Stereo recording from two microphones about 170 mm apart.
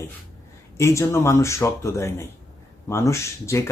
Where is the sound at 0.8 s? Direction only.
15° left (ahead or behind).